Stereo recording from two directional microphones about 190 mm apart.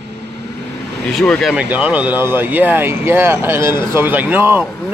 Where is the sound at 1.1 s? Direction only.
5° left (ahead or behind).